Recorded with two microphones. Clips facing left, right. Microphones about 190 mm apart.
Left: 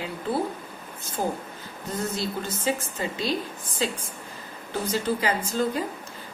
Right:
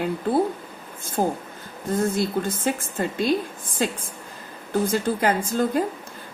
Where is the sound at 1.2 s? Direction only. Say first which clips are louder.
Right 4 dB; 50° right (ahead or behind).